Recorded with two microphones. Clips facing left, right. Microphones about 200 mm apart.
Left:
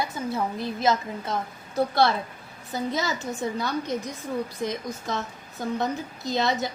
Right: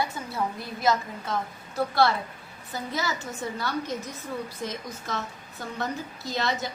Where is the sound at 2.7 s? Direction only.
20° left (ahead or behind).